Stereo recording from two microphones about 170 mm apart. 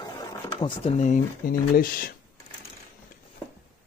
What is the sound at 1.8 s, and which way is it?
Speech, 60° left (ahead or behind).